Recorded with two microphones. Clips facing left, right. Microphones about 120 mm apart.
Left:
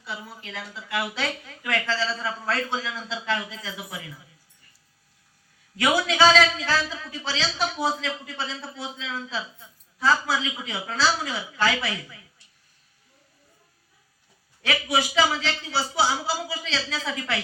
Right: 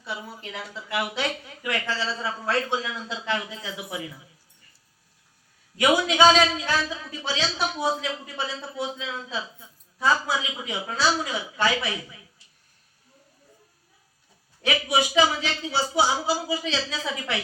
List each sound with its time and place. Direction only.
0.5 s speech: 20° right (ahead or behind)
5.8 s speech: 20° right (ahead or behind)
14.6 s speech: 20° right (ahead or behind)